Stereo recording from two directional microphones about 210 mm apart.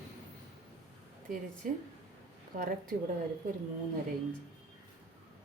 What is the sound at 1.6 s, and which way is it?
Speech, 40° right (ahead or behind).